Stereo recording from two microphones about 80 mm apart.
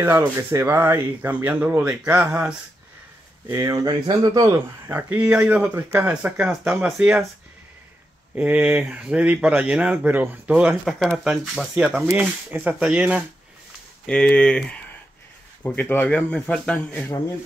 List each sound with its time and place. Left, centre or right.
0.0 s speech: right
1.3 s speech: centre
3.4 s speech: right
3.8 s speech: right
4.9 s speech: right
8.4 s speech: right
10.7 s speech: centre
14.0 s speech: centre
15.6 s speech: left